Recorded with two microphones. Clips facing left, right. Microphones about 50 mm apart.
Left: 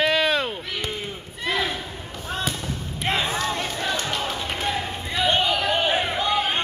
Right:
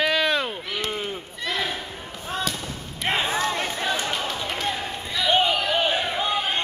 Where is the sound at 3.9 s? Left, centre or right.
Centre.